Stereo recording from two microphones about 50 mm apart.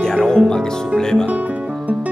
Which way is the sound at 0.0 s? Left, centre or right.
Centre.